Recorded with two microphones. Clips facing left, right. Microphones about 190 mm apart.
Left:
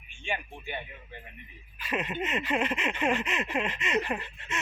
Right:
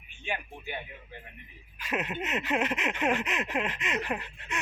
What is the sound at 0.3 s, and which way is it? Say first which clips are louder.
Speech: left 1 dB; 5° right (ahead or behind).